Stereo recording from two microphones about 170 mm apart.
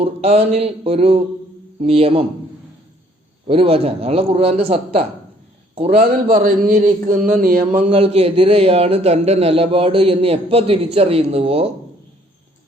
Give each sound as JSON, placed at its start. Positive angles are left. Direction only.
{"t": 0.0, "sound": "a man's voice", "side_deg": -35}
{"t": 3.4, "sound": "a man's voice", "side_deg": -35}
{"t": 5.9, "sound": "a man's voice", "side_deg": -60}